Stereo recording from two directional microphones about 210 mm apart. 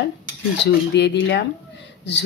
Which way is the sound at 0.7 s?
55° left (ahead or behind).